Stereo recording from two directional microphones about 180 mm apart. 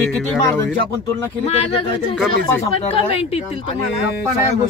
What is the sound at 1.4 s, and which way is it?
Speech, 35° left (ahead or behind).